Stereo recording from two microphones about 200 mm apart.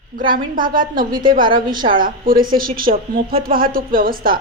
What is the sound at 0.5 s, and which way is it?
Speech, 45° right (ahead or behind).